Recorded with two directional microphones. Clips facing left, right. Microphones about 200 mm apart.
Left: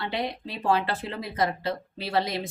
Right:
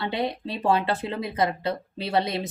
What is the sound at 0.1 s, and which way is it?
Speech, 25° right (ahead or behind).